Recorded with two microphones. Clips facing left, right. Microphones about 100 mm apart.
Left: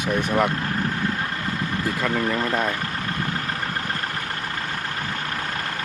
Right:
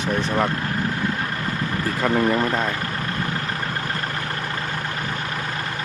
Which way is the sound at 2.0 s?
25° right (ahead or behind).